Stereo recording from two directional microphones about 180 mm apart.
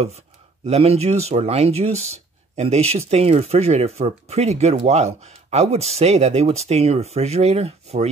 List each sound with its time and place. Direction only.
0.7 s speech: 35° right (ahead or behind)